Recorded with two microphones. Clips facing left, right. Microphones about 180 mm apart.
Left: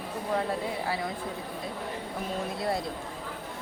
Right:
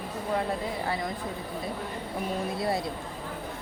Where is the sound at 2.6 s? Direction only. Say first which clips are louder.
Right 1 dB; centre (ahead or behind).